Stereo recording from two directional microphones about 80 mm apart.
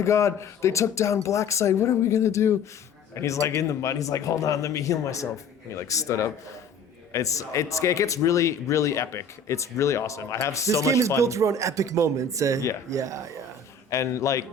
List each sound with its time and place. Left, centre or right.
0.0 s speech: left
11.2 s speech: right
13.9 s speech: left